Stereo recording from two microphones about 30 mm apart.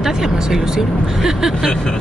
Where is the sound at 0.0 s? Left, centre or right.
Centre.